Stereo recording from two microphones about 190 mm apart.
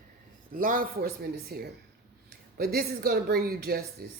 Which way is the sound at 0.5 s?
45° right (ahead or behind).